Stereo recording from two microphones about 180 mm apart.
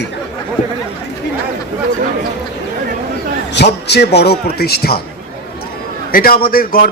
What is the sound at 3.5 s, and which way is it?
A man's voice, 70° left (ahead or behind).